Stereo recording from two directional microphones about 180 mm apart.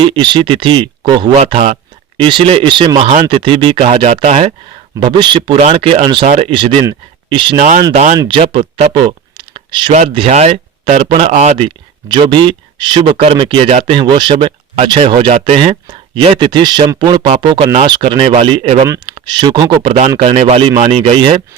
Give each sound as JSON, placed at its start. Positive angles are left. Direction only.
{"t": 0.0, "sound": "speech", "side_deg": -25}
{"t": 4.9, "sound": "speech", "side_deg": -25}
{"t": 8.4, "sound": "speech", "side_deg": -30}